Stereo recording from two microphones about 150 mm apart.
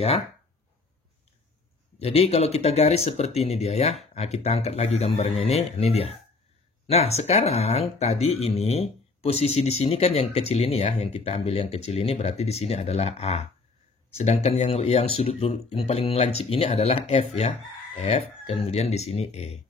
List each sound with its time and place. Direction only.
2.0 s speech: 40° left (ahead or behind)